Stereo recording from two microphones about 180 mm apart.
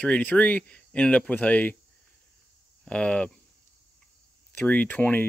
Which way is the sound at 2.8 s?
5° left (ahead or behind).